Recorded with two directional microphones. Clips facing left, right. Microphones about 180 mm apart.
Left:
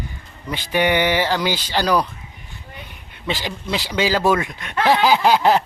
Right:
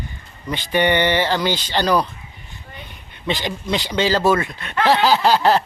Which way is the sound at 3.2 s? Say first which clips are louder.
Right 2 dB; 5° left (ahead or behind).